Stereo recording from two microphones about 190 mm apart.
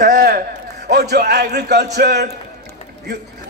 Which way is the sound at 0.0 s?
55° right (ahead or behind).